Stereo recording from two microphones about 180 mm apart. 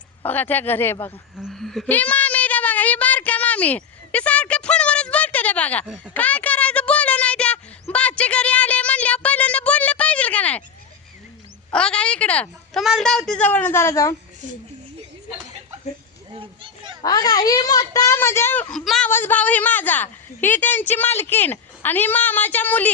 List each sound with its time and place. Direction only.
0.2 s a woman's voice: 10° left (ahead or behind)
1.4 s a sound: centre (ahead or behind)
11.7 s a woman's voice: 5° left (ahead or behind)
16.3 s a sound: 30° right (ahead or behind)
17.0 s a woman's voice: 20° left (ahead or behind)
18.7 s a woman's voice: 5° left (ahead or behind)